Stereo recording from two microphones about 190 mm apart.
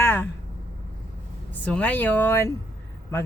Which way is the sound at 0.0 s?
10° left (ahead or behind).